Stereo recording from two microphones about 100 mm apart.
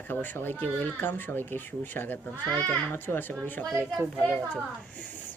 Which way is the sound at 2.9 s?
20° left (ahead or behind).